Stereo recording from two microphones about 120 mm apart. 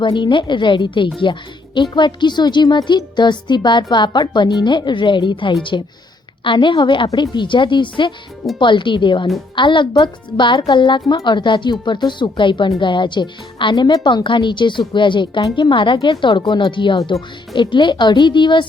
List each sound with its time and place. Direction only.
0.0 s a woman's voice: 40° left (ahead or behind)